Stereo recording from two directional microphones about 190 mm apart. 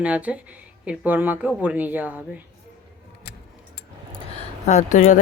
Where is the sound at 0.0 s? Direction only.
5° right (ahead or behind).